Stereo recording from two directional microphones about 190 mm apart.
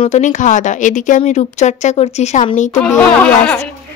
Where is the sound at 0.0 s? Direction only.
40° left (ahead or behind).